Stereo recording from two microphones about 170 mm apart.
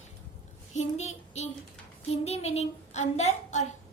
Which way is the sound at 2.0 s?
40° left (ahead or behind).